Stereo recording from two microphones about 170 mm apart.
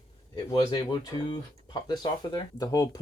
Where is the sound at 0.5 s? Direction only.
25° left (ahead or behind).